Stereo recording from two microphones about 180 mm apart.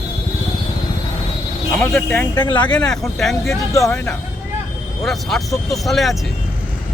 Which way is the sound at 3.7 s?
15° left (ahead or behind).